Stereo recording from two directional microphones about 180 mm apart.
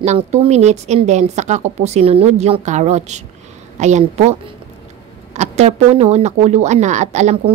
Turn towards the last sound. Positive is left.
turn(degrees=-40)  # may be behind; listen again after turning